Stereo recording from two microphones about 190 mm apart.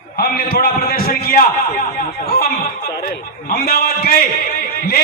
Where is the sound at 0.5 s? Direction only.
50° left (ahead or behind).